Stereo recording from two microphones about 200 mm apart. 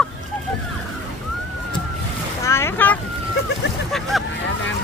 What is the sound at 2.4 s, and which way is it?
Boat, 15° left (ahead or behind).